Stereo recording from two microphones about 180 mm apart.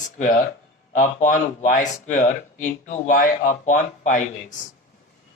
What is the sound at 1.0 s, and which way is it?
Speech, 40° left (ahead or behind).